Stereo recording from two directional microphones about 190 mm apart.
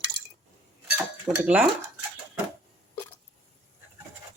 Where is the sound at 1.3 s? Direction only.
15° right (ahead or behind).